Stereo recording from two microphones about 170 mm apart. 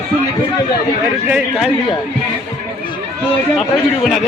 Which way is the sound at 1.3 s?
5° right (ahead or behind).